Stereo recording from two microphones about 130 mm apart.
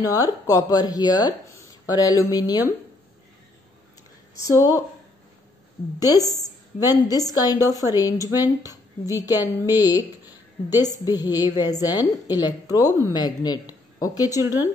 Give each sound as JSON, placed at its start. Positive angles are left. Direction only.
{"t": 0.0, "sound": "speech", "side_deg": 25}
{"t": 4.4, "sound": "speech", "side_deg": 25}
{"t": 5.9, "sound": "speech", "side_deg": 30}
{"t": 14.4, "sound": "speech", "side_deg": -15}